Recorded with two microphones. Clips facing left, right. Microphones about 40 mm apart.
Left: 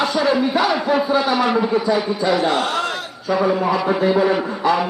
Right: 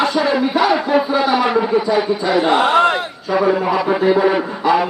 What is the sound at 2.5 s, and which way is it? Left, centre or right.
Speech, right.